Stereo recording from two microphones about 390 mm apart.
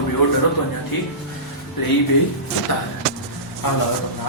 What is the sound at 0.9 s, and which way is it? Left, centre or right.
Speech, left.